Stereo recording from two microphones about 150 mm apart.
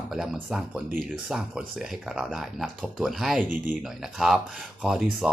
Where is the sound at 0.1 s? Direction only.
5° right (ahead or behind).